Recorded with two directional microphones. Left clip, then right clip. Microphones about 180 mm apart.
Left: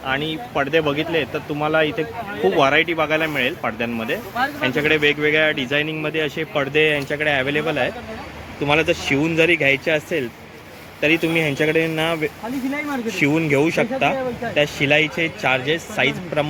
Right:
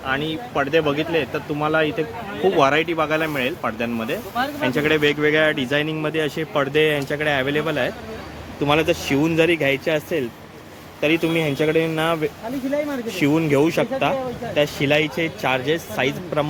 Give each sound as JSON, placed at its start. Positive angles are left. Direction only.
{"t": 0.1, "sound": "speech", "side_deg": -5}